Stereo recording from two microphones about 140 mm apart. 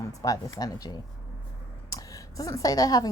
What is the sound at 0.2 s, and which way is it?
A woman's voice, 25° left (ahead or behind).